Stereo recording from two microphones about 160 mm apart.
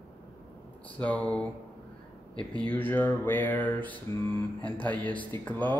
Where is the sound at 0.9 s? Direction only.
10° left (ahead or behind).